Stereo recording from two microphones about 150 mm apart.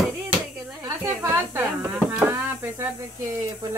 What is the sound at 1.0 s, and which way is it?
Speech, 15° right (ahead or behind).